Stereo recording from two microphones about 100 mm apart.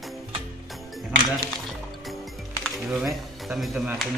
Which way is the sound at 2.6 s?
Centre (ahead or behind).